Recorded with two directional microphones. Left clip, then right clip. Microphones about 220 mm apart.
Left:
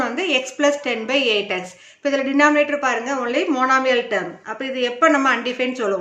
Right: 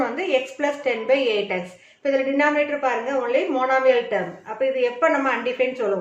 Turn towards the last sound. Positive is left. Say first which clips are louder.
# even
turn(degrees=45)  # may be behind; listen again after turning